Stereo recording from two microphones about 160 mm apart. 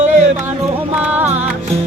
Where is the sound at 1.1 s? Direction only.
10° right (ahead or behind).